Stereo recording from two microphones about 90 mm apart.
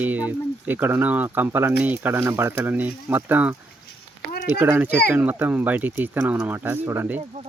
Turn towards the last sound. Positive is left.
turn(degrees=-25)  # may be behind; listen again after turning